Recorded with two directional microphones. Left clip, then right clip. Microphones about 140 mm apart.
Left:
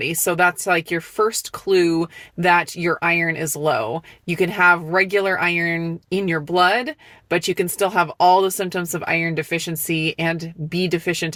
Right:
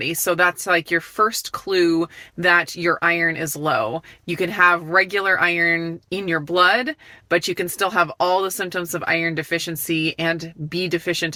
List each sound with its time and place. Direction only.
0.0 s speech: 20° left (ahead or behind)